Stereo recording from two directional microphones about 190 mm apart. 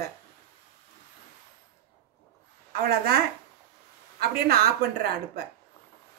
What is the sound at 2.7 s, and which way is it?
Speech, 55° right (ahead or behind).